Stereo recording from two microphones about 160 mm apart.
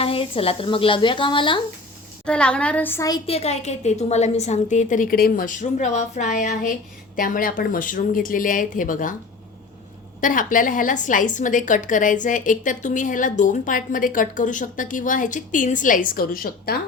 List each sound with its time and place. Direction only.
0.0 s speech: 35° left (ahead or behind)
2.2 s a woman's voice: 5° left (ahead or behind)
3.2 s a woman's voice: 40° left (ahead or behind); by 9.1 s 55° left (ahead or behind)
10.2 s a woman's voice: 55° left (ahead or behind); by 16.8 s 70° left (ahead or behind)